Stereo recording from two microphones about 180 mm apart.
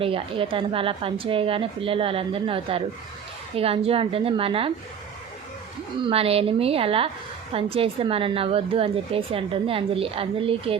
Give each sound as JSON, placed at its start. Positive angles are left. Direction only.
{"t": 0.0, "sound": "a woman's voice", "side_deg": -30}
{"t": 6.0, "sound": "a woman's voice", "side_deg": -30}